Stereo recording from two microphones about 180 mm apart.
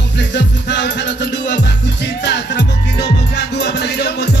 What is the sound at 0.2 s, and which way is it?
Music, 75° left (ahead or behind).